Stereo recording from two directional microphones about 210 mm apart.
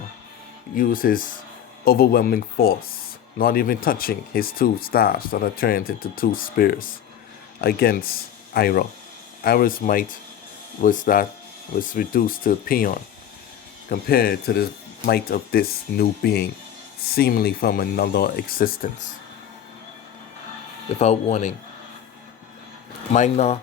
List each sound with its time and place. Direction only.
0.8 s speech: 40° left (ahead or behind)
21.0 s speech: 30° left (ahead or behind)
23.1 s speech: 35° left (ahead or behind)